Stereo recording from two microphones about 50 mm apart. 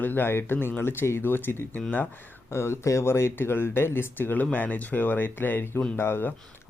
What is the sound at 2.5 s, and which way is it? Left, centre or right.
Speech, left.